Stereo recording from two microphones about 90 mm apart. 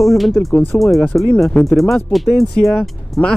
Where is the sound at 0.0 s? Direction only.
Centre (ahead or behind).